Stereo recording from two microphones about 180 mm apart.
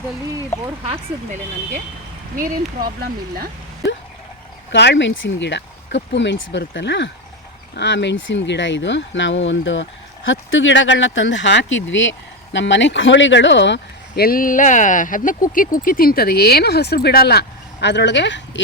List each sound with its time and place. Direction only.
0.9 s speech: 40° right (ahead or behind)
2.8 s speech: 55° right (ahead or behind)
4.7 s speech: 80° left